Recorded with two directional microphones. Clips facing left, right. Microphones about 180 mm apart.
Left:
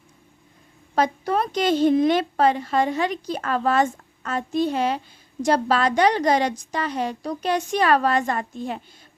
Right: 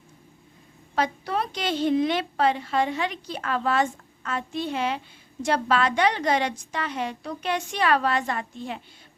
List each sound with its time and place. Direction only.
0.9 s a woman's voice: 45° left (ahead or behind)